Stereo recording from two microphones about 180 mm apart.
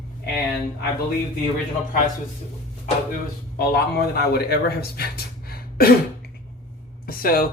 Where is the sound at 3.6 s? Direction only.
60° left (ahead or behind).